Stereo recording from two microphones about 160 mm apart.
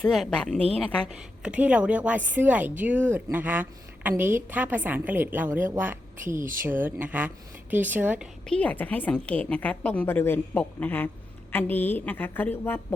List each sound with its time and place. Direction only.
0.0 s a woman's voice: centre (ahead or behind); by 6.4 s 15° right (ahead or behind)
6.4 s speech: 60° right (ahead or behind)
6.7 s a woman's voice: 10° right (ahead or behind)
8.4 s a woman's voice: 5° left (ahead or behind)